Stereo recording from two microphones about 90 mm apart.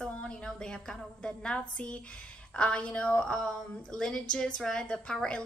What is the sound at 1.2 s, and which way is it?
A woman's voice, 10° left (ahead or behind).